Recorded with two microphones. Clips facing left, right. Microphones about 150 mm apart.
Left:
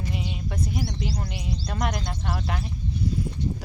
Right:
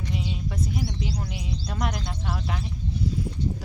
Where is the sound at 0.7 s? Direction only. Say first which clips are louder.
Even; centre (ahead or behind).